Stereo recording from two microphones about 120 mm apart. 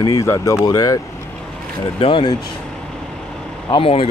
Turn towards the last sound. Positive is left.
turn(degrees=50)  # may be behind; listen again after turning